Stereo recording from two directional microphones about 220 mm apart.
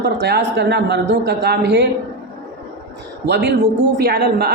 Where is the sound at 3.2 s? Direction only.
50° right (ahead or behind).